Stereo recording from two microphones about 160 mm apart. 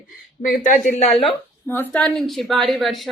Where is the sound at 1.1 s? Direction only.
Centre (ahead or behind).